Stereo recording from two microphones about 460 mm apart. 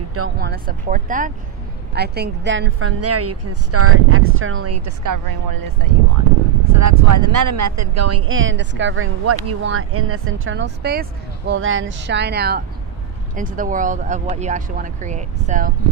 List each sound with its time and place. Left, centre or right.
0.1 s speech: right